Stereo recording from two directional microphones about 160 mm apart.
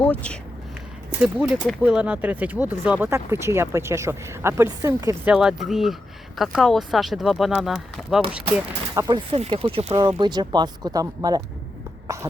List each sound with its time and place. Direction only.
0.0 s speech: 10° left (ahead or behind)
1.2 s speech: 5° right (ahead or behind)
5.2 s speech: 5° right (ahead or behind)
9.0 s speech: 25° right (ahead or behind)
12.0 s cough: 20° right (ahead or behind)